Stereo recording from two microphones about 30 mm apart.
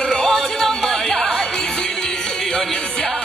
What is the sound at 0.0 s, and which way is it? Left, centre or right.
Music, left.